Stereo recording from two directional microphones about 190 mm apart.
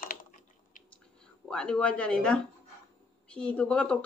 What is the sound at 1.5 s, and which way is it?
A man's voice, 5° left (ahead or behind).